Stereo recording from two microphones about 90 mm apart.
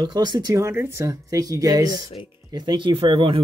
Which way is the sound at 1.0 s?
40° right (ahead or behind).